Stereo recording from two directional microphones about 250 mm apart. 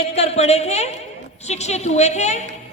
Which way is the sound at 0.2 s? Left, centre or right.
Left.